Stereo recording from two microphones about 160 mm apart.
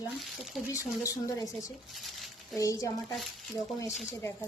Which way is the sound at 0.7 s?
20° left (ahead or behind).